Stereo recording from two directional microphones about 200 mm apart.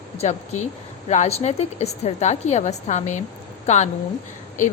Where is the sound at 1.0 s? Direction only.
35° left (ahead or behind).